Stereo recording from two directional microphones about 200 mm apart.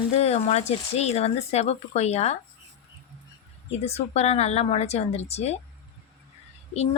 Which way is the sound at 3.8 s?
30° left (ahead or behind).